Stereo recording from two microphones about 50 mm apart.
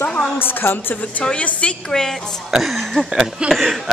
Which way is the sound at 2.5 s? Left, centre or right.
Centre.